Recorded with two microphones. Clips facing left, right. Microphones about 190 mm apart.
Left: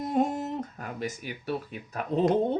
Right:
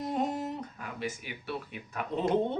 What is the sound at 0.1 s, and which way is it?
Speech, 45° left (ahead or behind).